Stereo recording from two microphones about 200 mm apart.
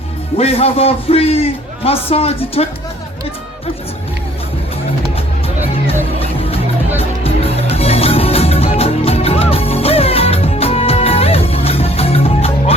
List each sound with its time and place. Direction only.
0.3 s a man's voice: 30° left (ahead or behind)
5.9 s music: 30° left (ahead or behind)